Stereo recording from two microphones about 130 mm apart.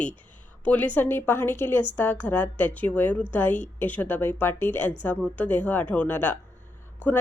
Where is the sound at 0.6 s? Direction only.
10° left (ahead or behind).